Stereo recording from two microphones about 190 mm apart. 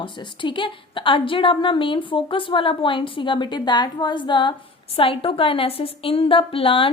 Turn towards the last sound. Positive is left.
turn(degrees=30)  # may be behind; listen again after turning